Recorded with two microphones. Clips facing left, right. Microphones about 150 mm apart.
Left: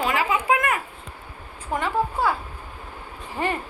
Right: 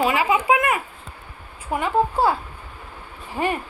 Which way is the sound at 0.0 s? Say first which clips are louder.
Right 3 dB; 10° right (ahead or behind).